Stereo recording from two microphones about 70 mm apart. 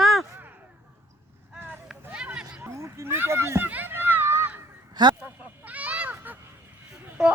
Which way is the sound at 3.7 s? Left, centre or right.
Right.